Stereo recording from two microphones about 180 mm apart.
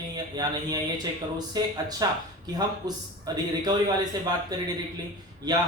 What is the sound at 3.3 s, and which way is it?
Speech, 20° right (ahead or behind).